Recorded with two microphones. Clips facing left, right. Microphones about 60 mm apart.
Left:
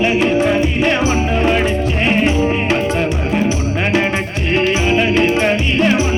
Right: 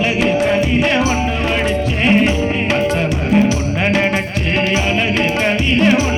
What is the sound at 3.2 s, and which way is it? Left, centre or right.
Music, centre.